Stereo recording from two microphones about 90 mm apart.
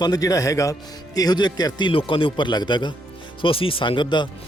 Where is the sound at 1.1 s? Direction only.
50° left (ahead or behind).